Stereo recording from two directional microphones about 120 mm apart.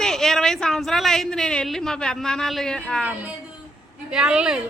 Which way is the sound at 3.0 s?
10° right (ahead or behind).